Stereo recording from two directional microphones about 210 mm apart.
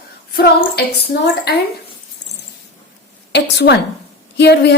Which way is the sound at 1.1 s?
50° left (ahead or behind).